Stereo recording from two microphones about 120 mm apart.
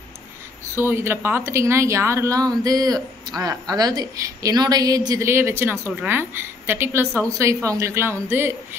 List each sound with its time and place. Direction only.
0.7 s a woman's voice: 20° right (ahead or behind)